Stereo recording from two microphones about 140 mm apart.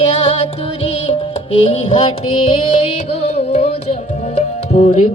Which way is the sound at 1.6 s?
45° left (ahead or behind).